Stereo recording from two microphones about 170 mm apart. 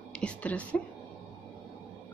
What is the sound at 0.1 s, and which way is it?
Speech, 5° left (ahead or behind).